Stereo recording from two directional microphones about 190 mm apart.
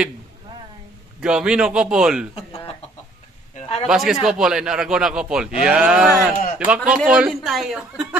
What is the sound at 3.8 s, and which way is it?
A man's voice, 5° right (ahead or behind).